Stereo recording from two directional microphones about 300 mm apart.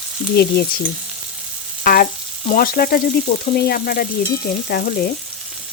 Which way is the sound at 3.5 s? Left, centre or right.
Left.